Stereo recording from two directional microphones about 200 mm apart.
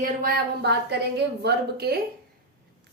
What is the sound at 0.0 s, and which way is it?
A woman's voice, 45° right (ahead or behind).